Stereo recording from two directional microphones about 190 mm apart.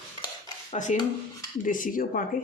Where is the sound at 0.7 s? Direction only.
40° left (ahead or behind).